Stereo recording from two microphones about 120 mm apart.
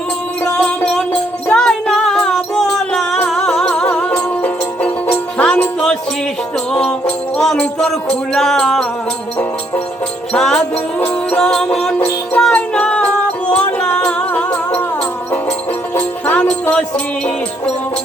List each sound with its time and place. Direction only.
0.4 s music: 5° left (ahead or behind)
10.3 s music: 5° left (ahead or behind)
11.9 s music: 15° left (ahead or behind)
12.4 s music: 5° left (ahead or behind)
16.0 s music: 15° left (ahead or behind)